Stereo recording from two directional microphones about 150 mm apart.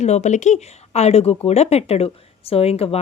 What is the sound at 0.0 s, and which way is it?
Speech, 50° left (ahead or behind).